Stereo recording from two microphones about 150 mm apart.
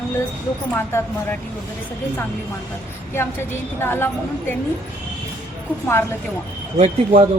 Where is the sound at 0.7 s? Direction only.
15° left (ahead or behind).